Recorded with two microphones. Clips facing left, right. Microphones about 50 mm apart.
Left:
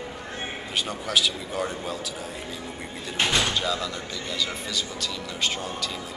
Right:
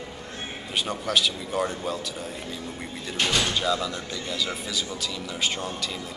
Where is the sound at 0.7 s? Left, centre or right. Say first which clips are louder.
Right 1 dB; centre.